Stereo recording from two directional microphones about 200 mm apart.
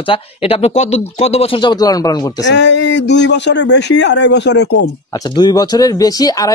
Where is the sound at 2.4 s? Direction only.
60° left (ahead or behind).